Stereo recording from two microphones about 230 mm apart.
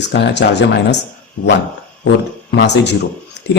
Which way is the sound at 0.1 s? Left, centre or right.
Left.